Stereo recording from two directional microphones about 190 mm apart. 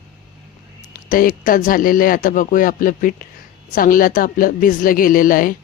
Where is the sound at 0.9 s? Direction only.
45° left (ahead or behind).